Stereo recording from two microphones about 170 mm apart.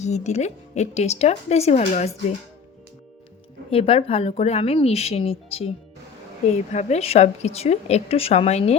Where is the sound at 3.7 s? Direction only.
35° left (ahead or behind).